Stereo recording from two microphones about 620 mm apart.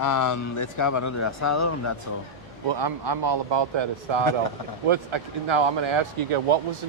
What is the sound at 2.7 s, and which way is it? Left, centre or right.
Speech, right.